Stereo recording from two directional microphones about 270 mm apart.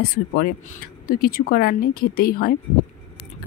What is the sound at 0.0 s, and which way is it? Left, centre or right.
Speech, left.